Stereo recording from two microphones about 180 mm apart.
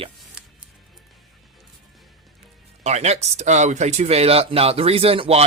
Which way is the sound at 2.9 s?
40° right (ahead or behind).